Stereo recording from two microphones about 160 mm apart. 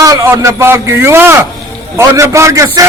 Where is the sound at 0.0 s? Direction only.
20° right (ahead or behind).